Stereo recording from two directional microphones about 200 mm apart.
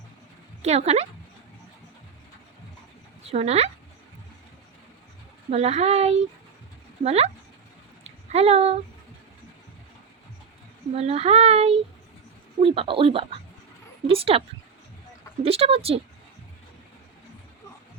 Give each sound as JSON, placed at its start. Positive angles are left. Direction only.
{"t": 0.6, "sound": "speech", "side_deg": -30}
{"t": 3.2, "sound": "speech", "side_deg": -30}
{"t": 5.5, "sound": "speech", "side_deg": -30}
{"t": 8.0, "sound": "a sound", "side_deg": -30}
{"t": 10.9, "sound": "speech", "side_deg": -30}
{"t": 15.4, "sound": "speech", "side_deg": -30}